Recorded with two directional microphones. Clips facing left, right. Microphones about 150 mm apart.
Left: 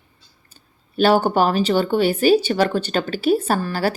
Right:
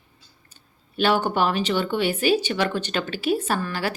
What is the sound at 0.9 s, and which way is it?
A woman's voice, 40° left (ahead or behind).